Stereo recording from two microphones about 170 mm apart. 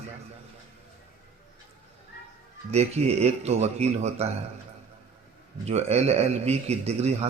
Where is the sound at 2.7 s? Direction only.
40° right (ahead or behind).